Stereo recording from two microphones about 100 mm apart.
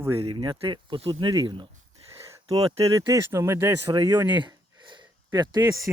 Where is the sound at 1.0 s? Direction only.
65° right (ahead or behind).